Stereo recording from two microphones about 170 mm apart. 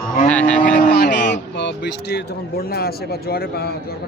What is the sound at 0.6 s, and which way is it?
Speech, 55° left (ahead or behind).